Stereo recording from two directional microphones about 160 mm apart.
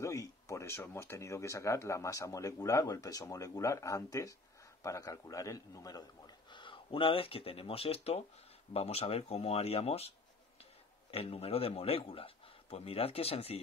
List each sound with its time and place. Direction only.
0.0 s a man's voice: 20° left (ahead or behind); by 13.6 s 40° left (ahead or behind)